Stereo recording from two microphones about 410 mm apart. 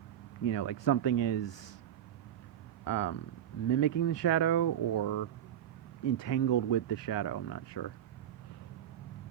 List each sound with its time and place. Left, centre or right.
0.4 s speech: left
2.8 s speech: left
4.6 s speech: left
6.1 s speech: left